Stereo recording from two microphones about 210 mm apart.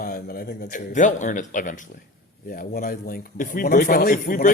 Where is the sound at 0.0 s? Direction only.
45° left (ahead or behind).